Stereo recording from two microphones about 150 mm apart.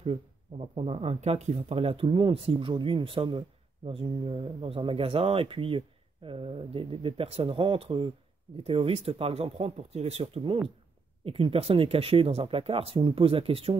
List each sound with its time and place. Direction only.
0.0 s speech: 40° right (ahead or behind)